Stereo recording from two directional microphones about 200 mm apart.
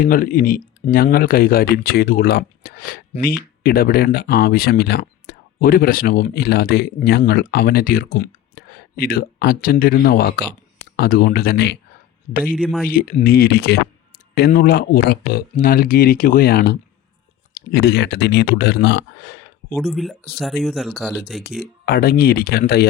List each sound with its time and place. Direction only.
0.0 s speech: 45° left (ahead or behind)
12.5 s speech: 5° right (ahead or behind)
12.9 s speech: 45° left (ahead or behind)
19.7 s speech: centre (ahead or behind)
21.6 s speech: 50° left (ahead or behind)